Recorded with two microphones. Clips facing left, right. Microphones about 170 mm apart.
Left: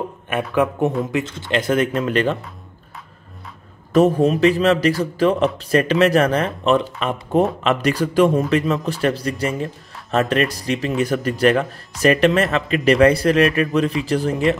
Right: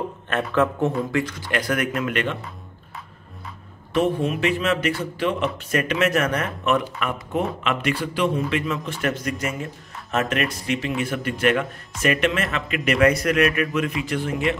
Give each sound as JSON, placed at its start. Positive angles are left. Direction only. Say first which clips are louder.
{"t": 0.3, "sound": "speech", "louder": "left 2 dB", "side_deg": 15}
{"t": 3.9, "sound": "speech", "louder": "left 7 dB", "side_deg": 40}
{"t": 7.6, "sound": "speech", "louder": "left 5 dB", "side_deg": 40}